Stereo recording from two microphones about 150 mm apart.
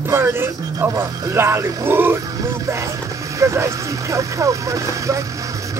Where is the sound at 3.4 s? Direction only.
20° right (ahead or behind).